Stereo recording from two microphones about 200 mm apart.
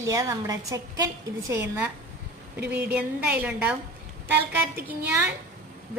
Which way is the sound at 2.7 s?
5° right (ahead or behind).